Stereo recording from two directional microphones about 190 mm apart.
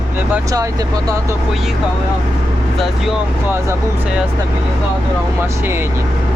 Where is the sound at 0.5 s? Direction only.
20° right (ahead or behind).